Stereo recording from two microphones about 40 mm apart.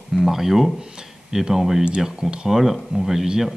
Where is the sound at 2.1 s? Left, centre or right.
Right.